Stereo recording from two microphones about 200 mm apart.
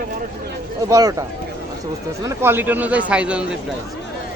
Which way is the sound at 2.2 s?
15° right (ahead or behind).